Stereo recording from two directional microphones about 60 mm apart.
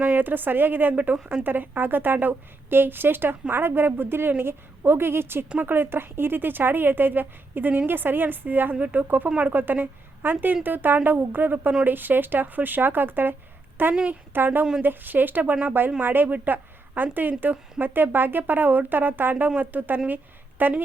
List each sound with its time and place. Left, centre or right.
0.0 s a woman's voice: right
5.5 s a woman's voice: right